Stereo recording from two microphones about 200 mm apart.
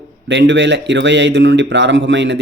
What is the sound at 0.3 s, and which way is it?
Speech, 65° right (ahead or behind).